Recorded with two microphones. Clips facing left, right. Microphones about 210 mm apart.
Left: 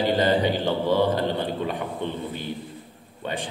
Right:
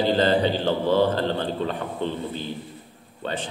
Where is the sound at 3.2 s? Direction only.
15° left (ahead or behind).